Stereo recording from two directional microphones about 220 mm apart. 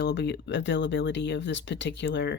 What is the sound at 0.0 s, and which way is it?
Speech, 50° left (ahead or behind).